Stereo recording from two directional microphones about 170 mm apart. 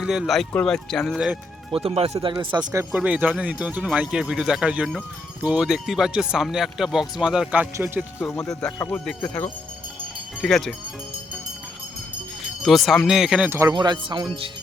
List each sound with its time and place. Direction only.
0.0 s speech: 5° right (ahead or behind)
1.7 s speech: 35° right (ahead or behind)
2.5 s speech: 20° right (ahead or behind)
2.9 s speech: 10° right (ahead or behind)
8.4 s speech: 5° left (ahead or behind)
12.6 s speech: centre (ahead or behind)
13.7 s speech: 25° right (ahead or behind)